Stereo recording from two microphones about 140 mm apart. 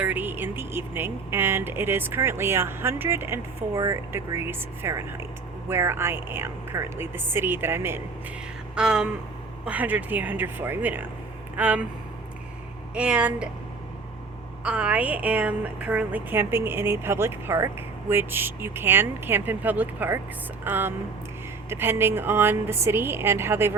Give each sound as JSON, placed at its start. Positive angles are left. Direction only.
{"t": 0.0, "sound": "speech", "side_deg": -15}
{"t": 8.7, "sound": "a sound", "side_deg": -5}
{"t": 9.6, "sound": "speech", "side_deg": -10}
{"t": 12.9, "sound": "speech", "side_deg": -10}
{"t": 14.6, "sound": "speech", "side_deg": -10}